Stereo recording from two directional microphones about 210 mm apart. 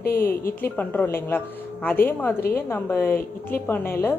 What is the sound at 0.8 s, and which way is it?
Speech, 10° left (ahead or behind).